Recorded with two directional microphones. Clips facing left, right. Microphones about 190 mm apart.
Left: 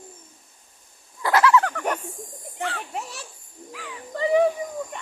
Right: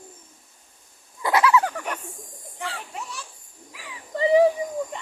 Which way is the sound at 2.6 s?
65° left (ahead or behind).